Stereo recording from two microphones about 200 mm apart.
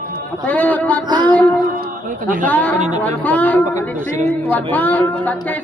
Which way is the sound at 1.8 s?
40° right (ahead or behind).